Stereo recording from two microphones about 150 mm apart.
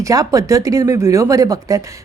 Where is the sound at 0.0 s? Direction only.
25° right (ahead or behind).